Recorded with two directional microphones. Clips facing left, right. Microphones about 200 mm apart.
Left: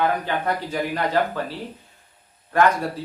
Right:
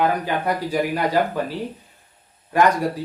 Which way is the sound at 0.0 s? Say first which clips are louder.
Right 2 dB; 10° right (ahead or behind).